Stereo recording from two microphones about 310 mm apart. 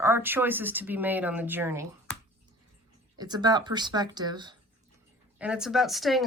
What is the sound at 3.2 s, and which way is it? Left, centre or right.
Speech, centre.